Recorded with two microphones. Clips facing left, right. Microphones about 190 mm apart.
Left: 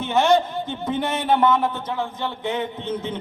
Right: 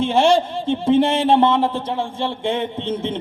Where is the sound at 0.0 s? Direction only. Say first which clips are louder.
Right 3 dB; 30° right (ahead or behind).